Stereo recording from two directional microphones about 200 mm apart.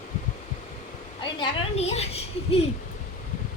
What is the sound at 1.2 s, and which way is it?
A woman's voice, 25° left (ahead or behind).